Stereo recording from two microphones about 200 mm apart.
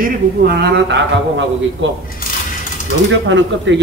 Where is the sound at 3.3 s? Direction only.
65° right (ahead or behind).